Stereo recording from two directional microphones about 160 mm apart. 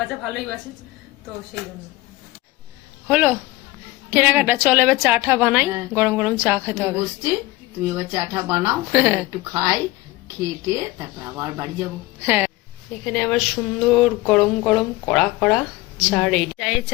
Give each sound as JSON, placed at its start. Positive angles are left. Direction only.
{"t": 0.3, "sound": "speech", "side_deg": 0}
{"t": 3.1, "sound": "a woman's voice", "side_deg": -10}
{"t": 13.1, "sound": "speech", "side_deg": 5}